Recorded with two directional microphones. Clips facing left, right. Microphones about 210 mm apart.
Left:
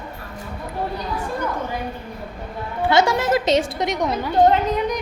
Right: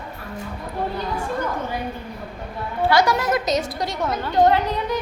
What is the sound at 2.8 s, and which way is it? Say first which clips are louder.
A woman's voice: left 1 dB; 25° left (ahead or behind).